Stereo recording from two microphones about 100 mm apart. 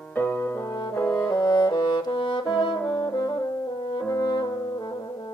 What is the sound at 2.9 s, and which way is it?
Brass instrument, 40° left (ahead or behind).